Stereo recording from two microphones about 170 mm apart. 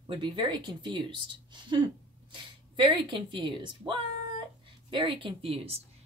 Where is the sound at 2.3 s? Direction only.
30° right (ahead or behind).